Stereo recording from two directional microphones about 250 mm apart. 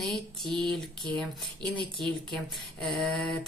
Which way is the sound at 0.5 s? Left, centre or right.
Centre.